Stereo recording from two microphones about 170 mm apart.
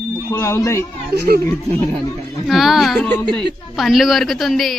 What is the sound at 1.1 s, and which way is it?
Speech, 75° right (ahead or behind).